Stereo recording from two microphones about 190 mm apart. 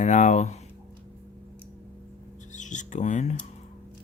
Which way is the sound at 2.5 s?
40° left (ahead or behind).